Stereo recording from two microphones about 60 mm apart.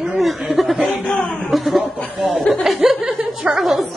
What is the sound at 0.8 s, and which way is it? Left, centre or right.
Speech, centre.